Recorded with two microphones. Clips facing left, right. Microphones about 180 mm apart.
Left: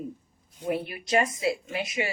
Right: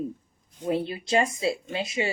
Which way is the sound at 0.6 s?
25° right (ahead or behind).